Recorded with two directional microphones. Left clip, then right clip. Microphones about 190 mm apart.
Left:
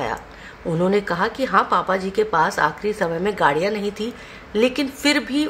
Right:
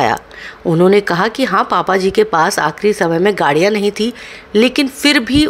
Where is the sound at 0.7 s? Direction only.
40° right (ahead or behind).